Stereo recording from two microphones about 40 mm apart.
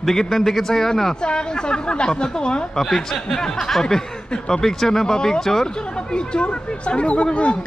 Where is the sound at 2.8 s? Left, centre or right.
Centre.